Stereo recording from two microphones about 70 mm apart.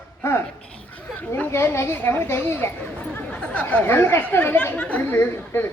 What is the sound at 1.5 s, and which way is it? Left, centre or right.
Speech, left.